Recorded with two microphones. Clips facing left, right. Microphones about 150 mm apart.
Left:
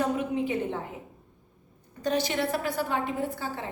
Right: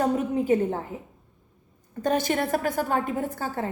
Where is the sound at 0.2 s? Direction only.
40° right (ahead or behind).